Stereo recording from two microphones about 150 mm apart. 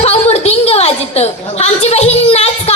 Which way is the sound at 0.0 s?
45° left (ahead or behind).